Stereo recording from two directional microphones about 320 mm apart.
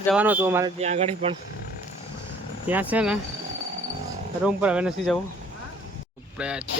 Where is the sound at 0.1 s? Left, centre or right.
Centre.